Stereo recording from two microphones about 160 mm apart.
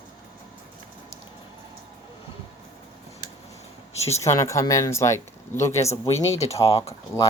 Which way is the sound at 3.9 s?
40° left (ahead or behind).